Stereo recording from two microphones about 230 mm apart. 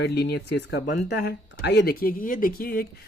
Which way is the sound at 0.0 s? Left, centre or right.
Left.